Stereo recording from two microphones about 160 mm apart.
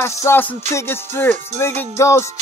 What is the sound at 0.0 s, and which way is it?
Music, 15° left (ahead or behind).